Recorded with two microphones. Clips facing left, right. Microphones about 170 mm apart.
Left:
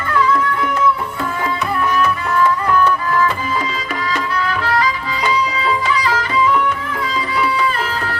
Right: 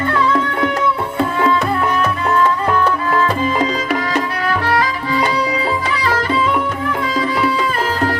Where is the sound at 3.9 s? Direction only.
45° right (ahead or behind).